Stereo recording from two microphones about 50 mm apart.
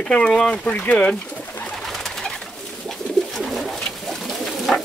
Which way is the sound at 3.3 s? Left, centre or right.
Centre.